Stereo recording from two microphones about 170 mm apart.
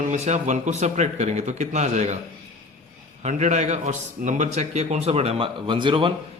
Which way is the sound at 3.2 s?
45° right (ahead or behind).